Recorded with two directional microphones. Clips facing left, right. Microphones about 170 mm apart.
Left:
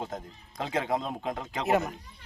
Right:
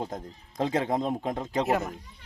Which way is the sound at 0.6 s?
40° right (ahead or behind).